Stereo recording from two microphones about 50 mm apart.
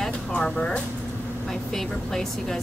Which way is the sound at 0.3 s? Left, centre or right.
Centre.